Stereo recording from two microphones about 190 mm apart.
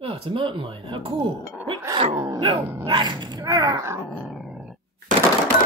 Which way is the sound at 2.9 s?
25° right (ahead or behind).